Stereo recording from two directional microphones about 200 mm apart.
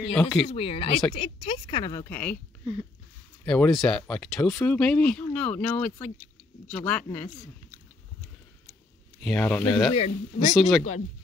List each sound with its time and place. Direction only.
0.1 s speech: 5° left (ahead or behind)
0.6 s speech: 30° left (ahead or behind)
2.0 s speech: 5° left (ahead or behind)
3.4 s speech: 5° left (ahead or behind)
9.2 s speech: 5° left (ahead or behind)
9.9 s speech: 35° left (ahead or behind)
10.5 s speech: centre (ahead or behind)